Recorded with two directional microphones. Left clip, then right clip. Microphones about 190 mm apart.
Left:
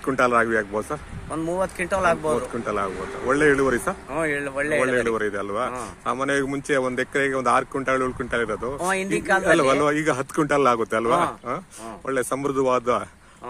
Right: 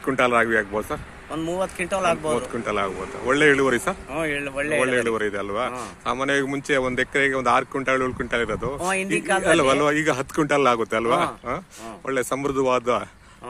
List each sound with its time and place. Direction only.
0.0 s a man's voice: 5° right (ahead or behind)